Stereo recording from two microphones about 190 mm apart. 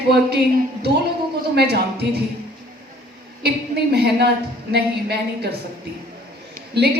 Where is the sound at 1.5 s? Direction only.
60° right (ahead or behind).